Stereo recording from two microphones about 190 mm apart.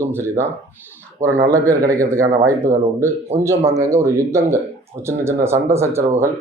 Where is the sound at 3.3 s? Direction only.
15° right (ahead or behind).